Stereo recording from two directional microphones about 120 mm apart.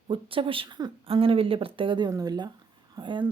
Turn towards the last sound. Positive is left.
turn(degrees=-40)  # may be behind; listen again after turning